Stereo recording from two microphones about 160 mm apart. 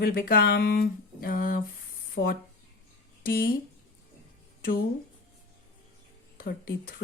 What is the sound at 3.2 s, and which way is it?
Speech, 65° left (ahead or behind).